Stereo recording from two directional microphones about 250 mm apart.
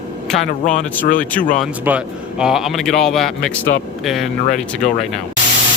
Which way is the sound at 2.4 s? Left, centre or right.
Centre.